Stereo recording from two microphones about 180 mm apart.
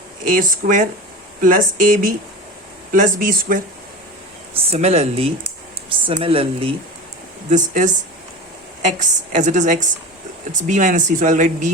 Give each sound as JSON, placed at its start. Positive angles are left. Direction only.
{"t": 0.3, "sound": "speech", "side_deg": -50}
{"t": 4.7, "sound": "speech", "side_deg": -35}
{"t": 7.5, "sound": "speech", "side_deg": -45}